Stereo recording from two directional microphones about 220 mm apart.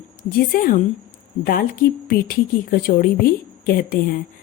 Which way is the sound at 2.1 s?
40° left (ahead or behind).